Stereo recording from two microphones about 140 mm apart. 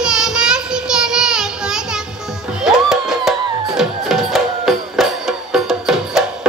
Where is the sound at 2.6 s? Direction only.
Centre (ahead or behind).